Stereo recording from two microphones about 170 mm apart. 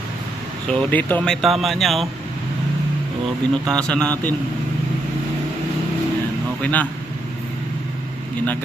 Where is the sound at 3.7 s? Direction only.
5° left (ahead or behind).